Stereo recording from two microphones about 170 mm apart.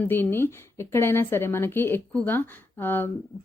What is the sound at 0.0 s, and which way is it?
Speech, 10° left (ahead or behind).